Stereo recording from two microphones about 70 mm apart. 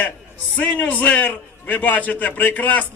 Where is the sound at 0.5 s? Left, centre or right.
Left.